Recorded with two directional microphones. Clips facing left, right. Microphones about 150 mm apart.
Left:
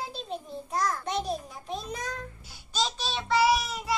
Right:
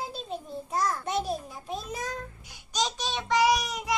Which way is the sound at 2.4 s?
15° right (ahead or behind).